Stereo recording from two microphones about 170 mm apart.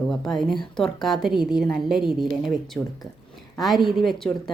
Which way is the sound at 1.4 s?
65° right (ahead or behind).